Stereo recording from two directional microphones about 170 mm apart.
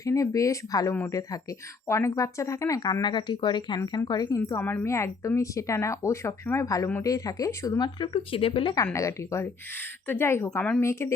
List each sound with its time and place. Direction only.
0.0 s speech: 20° left (ahead or behind)
8.7 s speech: 20° left (ahead or behind)